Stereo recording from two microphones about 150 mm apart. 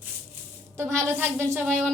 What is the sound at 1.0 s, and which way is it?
Speech, 15° right (ahead or behind).